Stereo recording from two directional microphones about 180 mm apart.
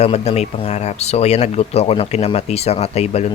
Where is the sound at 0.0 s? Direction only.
35° left (ahead or behind).